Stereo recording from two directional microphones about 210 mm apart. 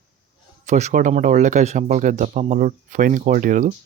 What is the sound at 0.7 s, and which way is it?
Speech, 35° right (ahead or behind).